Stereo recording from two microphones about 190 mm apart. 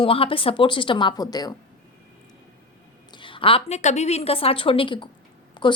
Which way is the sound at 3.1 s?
25° left (ahead or behind).